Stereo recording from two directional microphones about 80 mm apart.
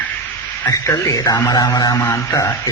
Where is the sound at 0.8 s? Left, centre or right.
Left.